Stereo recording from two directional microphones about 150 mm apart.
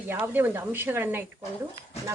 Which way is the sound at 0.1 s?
10° right (ahead or behind).